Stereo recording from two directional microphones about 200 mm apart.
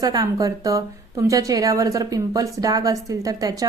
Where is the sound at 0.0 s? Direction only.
20° right (ahead or behind).